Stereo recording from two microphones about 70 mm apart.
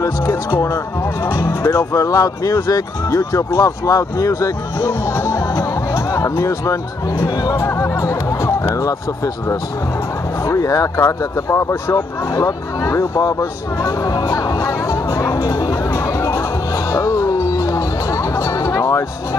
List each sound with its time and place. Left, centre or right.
1.7 s speech: left
4.8 s speech: left
6.1 s speech: left
10.4 s speech: left
16.9 s music: left